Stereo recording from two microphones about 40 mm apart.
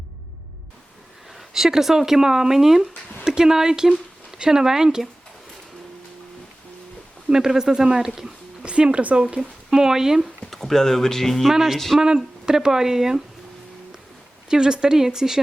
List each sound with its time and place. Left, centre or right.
1.3 s speech: centre
7.3 s speech: centre
8.6 s speech: right
9.4 s speech: centre
10.5 s speech: centre
11.9 s speech: centre
14.5 s speech: centre